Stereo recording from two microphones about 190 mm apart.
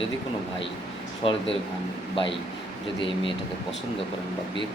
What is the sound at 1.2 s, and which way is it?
Speech, 30° left (ahead or behind).